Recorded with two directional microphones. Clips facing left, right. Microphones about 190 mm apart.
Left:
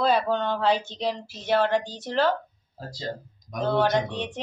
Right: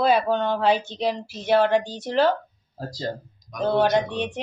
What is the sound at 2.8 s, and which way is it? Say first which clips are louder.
Speech: right 5 dB; 40° right (ahead or behind).